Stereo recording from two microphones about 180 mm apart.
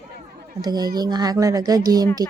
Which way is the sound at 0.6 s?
20° right (ahead or behind).